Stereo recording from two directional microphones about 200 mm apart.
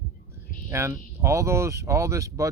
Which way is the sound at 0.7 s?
15° right (ahead or behind).